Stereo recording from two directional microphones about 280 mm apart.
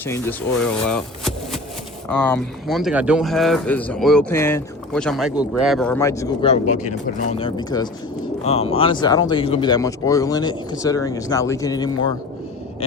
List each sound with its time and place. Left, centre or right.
0.0 s speech: centre
6.5 s speech: left